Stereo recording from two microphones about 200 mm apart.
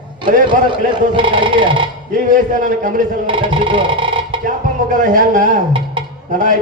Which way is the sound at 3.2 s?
25° right (ahead or behind).